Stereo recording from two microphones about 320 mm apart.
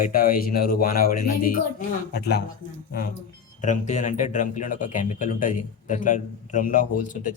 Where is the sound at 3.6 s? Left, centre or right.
Left.